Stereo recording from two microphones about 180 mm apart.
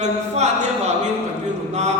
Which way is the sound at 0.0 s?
40° right (ahead or behind).